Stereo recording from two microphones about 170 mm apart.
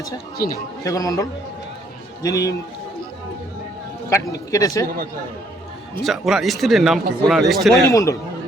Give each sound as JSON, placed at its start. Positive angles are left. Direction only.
{"t": 0.9, "sound": "a man's voice", "side_deg": 20}
{"t": 4.1, "sound": "a man's voice", "side_deg": 20}
{"t": 6.0, "sound": "speech", "side_deg": 0}
{"t": 7.9, "sound": "a man's voice", "side_deg": 20}